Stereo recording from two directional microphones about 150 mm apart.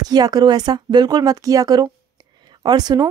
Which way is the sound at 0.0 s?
25° right (ahead or behind).